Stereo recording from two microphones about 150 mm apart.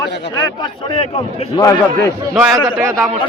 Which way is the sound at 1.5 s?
25° left (ahead or behind).